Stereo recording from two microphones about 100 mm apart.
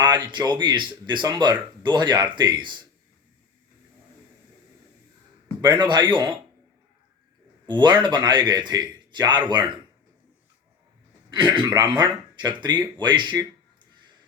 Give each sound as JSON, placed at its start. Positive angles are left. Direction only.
{"t": 0.0, "sound": "a man's voice", "side_deg": -50}
{"t": 5.6, "sound": "a man's voice", "side_deg": -50}
{"t": 7.7, "sound": "a man's voice", "side_deg": -50}
{"t": 11.3, "sound": "a man's voice", "side_deg": -55}